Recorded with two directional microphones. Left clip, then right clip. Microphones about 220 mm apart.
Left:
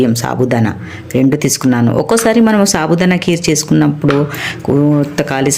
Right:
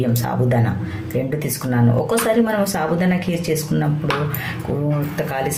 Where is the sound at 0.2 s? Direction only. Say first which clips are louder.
Left 6 dB; 40° left (ahead or behind).